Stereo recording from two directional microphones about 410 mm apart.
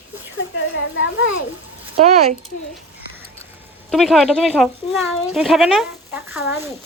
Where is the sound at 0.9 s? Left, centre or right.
Left.